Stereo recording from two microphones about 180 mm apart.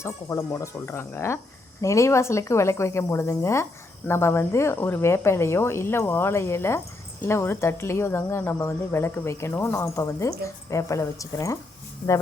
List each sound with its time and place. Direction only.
0.0 s speech: 15° left (ahead or behind)